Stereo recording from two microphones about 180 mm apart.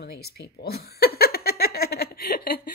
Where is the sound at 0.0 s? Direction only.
60° left (ahead or behind).